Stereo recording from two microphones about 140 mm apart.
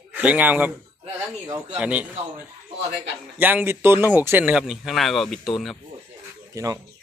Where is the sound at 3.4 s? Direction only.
15° right (ahead or behind).